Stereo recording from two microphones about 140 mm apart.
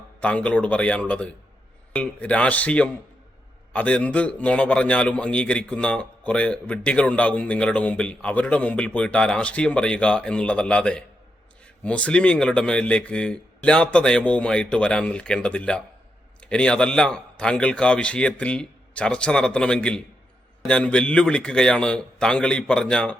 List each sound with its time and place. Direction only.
0.2 s a man's voice: 10° left (ahead or behind)